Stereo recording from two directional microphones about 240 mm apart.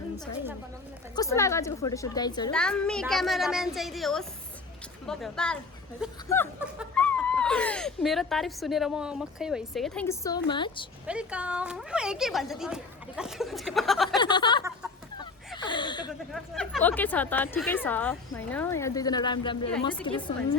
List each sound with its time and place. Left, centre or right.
1.1 s a woman's voice: centre
2.5 s a woman's voice: centre
11.0 s speech: centre
14.2 s speech: centre
15.5 s a sound: centre
16.3 s a woman's voice: centre; by 20.3 s left